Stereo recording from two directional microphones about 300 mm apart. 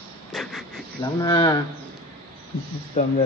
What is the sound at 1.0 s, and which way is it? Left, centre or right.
Speech, centre.